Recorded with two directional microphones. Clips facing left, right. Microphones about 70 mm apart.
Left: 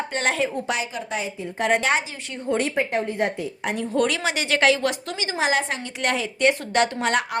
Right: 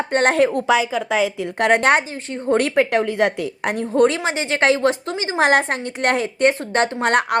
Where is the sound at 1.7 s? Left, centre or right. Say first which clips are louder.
Right 6 dB; right.